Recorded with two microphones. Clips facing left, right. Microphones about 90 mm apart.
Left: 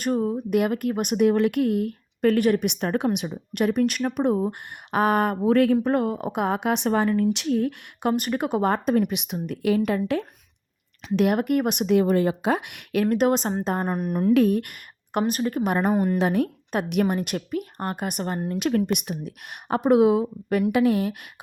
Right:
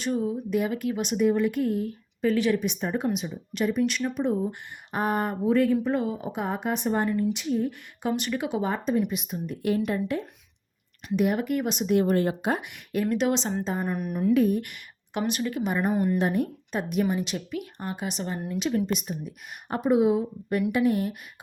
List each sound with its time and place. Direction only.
0.0 s speech: 50° left (ahead or behind); by 5.7 s 70° left (ahead or behind)
5.7 s speech: 60° left (ahead or behind); by 7.3 s 90° left
7.3 s a woman's voice: 70° left (ahead or behind)
8.1 s a woman's voice: 45° left (ahead or behind); by 10.2 s 90° left
11.3 s speech: 55° left (ahead or behind)
12.5 s speech: 80° left
13.1 s a woman's voice: 45° left (ahead or behind)
14.3 s a woman's voice: 70° left (ahead or behind); by 15.7 s 45° left (ahead or behind)
15.7 s speech: 65° left (ahead or behind)
16.1 s speech: 90° left; by 18.3 s 55° left (ahead or behind)
18.3 s a woman's voice: 35° left (ahead or behind)
18.9 s a woman's voice: 65° left (ahead or behind); by 21.2 s 90° left